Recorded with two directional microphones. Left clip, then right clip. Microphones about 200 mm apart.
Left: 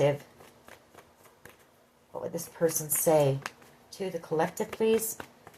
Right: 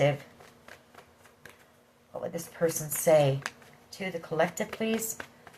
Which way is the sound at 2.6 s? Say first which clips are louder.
Left 1 dB; 30° left (ahead or behind).